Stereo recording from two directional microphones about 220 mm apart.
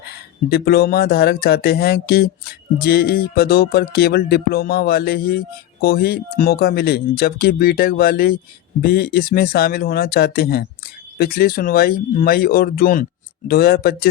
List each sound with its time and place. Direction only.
0.5 s speech: 45° left (ahead or behind)